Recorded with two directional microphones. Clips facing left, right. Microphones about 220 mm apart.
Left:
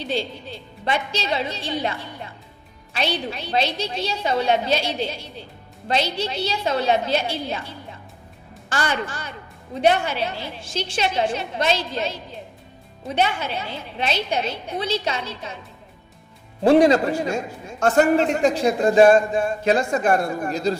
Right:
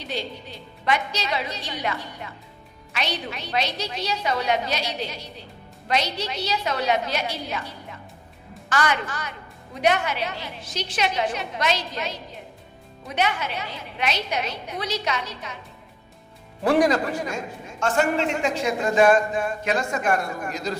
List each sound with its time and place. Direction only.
0.0 s a woman's voice: 30° left (ahead or behind)
16.6 s a man's voice: 25° left (ahead or behind)